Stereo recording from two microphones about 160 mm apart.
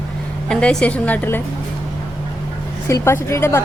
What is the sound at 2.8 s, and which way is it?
Speech, 15° left (ahead or behind).